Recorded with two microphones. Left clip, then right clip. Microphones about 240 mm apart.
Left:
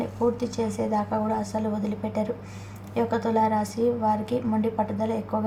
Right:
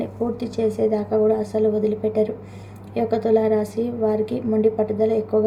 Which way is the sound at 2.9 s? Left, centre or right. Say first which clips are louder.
Right 5 dB; left.